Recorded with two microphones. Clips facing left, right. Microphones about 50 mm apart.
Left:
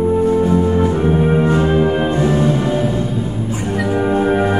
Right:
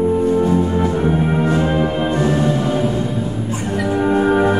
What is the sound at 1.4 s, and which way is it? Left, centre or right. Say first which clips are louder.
Music: left 2 dB; centre.